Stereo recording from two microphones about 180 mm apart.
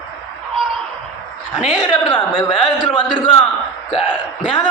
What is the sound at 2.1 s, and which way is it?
Speech, 25° left (ahead or behind).